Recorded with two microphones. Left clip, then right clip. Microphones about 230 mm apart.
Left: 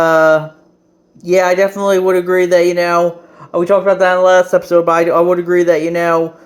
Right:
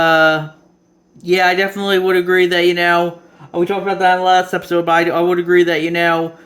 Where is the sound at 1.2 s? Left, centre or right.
Centre.